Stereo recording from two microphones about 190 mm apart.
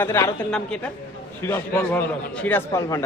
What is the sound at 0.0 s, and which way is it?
Speech, 15° left (ahead or behind).